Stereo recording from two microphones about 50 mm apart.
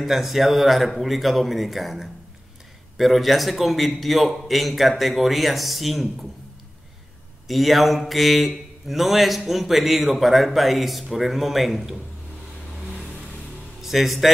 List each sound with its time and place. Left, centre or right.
0.0 s a man's voice: centre
7.4 s a man's voice: centre
13.7 s a man's voice: centre